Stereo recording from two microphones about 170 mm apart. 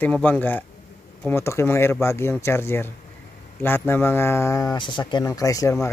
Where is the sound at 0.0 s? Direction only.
10° left (ahead or behind).